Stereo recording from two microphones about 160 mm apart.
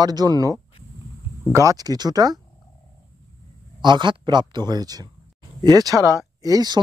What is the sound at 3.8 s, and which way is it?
Speech, 30° right (ahead or behind).